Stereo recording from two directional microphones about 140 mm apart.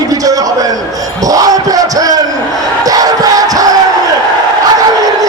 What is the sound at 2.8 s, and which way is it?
Battle cry, 25° right (ahead or behind).